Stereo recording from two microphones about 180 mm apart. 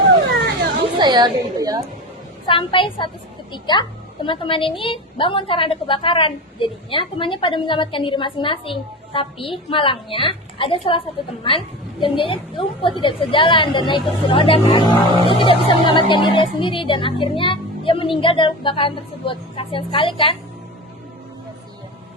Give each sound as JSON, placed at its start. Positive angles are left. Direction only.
{"t": 0.9, "sound": "a woman's voice", "side_deg": -25}
{"t": 2.5, "sound": "a woman's voice", "side_deg": 30}